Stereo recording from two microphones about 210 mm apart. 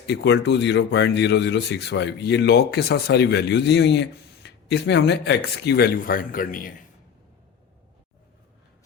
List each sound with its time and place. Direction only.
0.1 s a man's voice: 55° left (ahead or behind)